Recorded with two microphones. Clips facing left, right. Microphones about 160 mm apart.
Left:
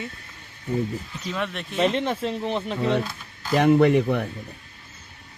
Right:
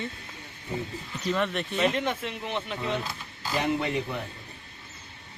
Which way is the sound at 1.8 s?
30° left (ahead or behind).